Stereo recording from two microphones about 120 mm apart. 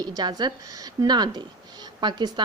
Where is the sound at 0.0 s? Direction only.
35° right (ahead or behind).